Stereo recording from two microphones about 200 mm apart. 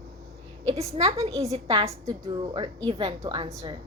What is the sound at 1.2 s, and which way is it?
A woman's voice, 15° right (ahead or behind).